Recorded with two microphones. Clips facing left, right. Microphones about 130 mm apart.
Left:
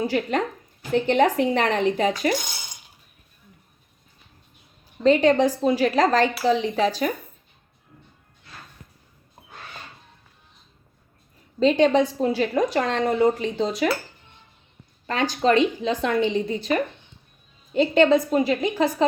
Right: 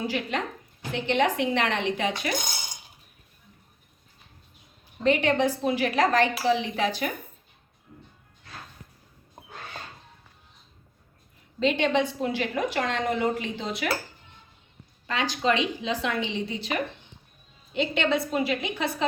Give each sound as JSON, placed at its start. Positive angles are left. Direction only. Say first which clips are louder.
{"t": 0.0, "sound": "a woman's voice", "louder": "left 6 dB", "side_deg": 40}
{"t": 5.0, "sound": "a woman's voice", "louder": "left 5 dB", "side_deg": 35}
{"t": 11.6, "sound": "a woman's voice", "louder": "left 6 dB", "side_deg": 35}
{"t": 15.0, "sound": "a woman's voice", "louder": "left 5 dB", "side_deg": 45}